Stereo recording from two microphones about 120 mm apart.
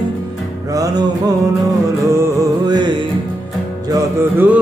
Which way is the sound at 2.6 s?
40° right (ahead or behind).